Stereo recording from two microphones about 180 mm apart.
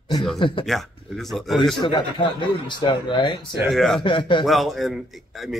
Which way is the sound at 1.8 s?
25° left (ahead or behind).